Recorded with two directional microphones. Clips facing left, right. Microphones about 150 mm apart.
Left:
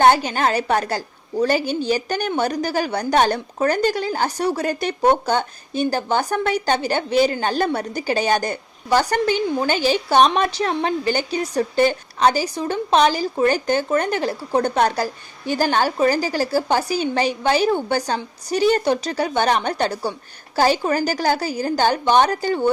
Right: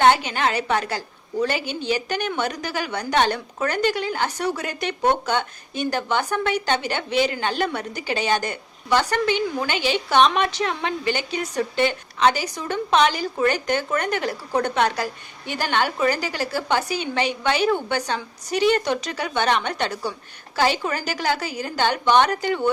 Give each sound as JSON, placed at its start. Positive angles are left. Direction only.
{"t": 0.0, "sound": "a woman's voice", "side_deg": 40}